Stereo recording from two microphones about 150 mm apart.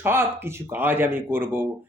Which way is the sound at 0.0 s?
15° right (ahead or behind).